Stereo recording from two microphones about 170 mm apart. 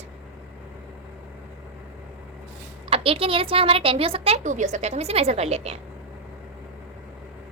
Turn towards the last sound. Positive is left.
turn(degrees=-40)  # may be behind; listen again after turning